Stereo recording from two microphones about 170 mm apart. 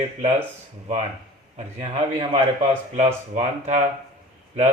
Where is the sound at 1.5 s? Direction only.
40° right (ahead or behind).